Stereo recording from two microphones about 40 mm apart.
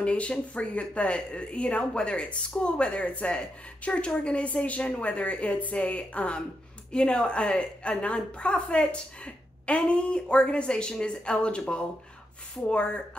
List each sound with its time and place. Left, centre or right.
0.0 s a woman's voice: left